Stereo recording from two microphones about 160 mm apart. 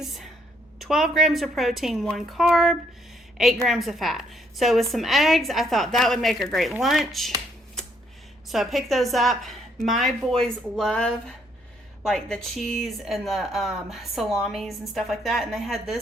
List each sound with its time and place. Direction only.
0.0 s a sound: centre (ahead or behind)
0.8 s a woman's voice: centre (ahead or behind)
8.4 s a woman's voice: centre (ahead or behind)